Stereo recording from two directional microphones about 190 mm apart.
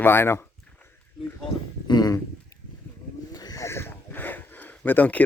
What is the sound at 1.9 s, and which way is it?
Speech, 20° left (ahead or behind).